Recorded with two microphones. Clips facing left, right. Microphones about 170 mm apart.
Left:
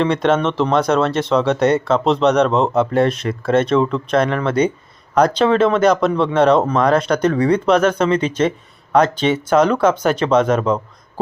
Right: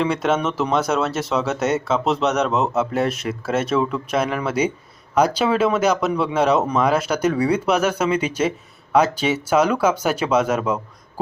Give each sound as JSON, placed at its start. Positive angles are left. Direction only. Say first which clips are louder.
{"t": 0.0, "sound": "speech", "louder": "left 4 dB", "side_deg": -5}
{"t": 2.5, "sound": "speech", "louder": "left 4 dB", "side_deg": 30}
{"t": 2.7, "sound": "speech", "louder": "left 5 dB", "side_deg": -5}